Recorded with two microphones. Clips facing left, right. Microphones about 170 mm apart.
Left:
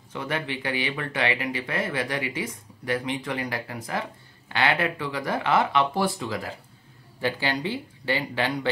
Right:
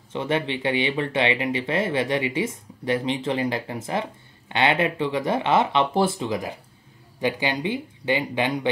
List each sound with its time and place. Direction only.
0.1 s speech: 25° right (ahead or behind)